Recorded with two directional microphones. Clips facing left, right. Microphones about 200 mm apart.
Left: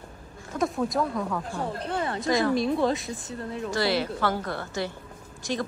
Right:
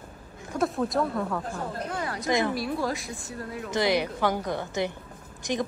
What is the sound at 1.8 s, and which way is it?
Speech, 30° left (ahead or behind).